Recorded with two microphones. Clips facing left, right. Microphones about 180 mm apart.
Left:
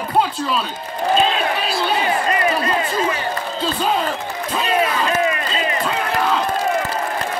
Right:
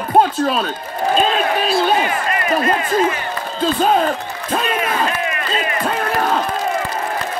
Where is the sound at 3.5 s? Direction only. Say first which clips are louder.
Right 6 dB; 50° right (ahead or behind).